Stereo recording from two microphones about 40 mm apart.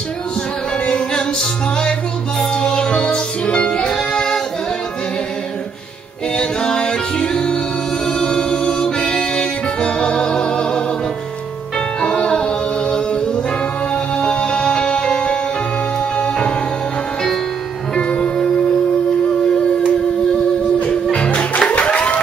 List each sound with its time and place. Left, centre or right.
0.8 s music: left
6.3 s a capella: left
8.1 s music: centre
12.0 s music: left
17.9 s music: left
20.8 s music: left